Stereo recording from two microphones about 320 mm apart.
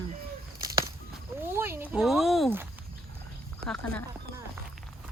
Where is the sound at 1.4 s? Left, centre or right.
Centre.